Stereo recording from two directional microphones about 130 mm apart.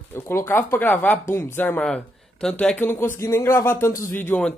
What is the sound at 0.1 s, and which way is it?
Speech, 20° left (ahead or behind).